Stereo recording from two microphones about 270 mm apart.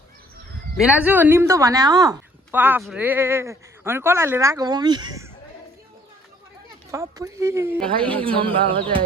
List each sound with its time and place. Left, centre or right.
0.8 s a woman's voice: centre
6.9 s a woman's voice: centre
8.1 s speech: centre